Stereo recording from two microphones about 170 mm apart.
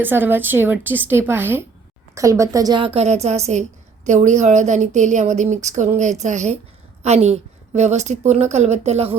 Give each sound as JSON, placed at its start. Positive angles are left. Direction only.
{"t": 0.0, "sound": "a woman's voice", "side_deg": -10}